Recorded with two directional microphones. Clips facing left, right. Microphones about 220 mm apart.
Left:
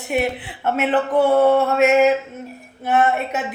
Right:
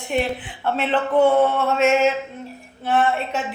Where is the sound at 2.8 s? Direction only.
10° left (ahead or behind).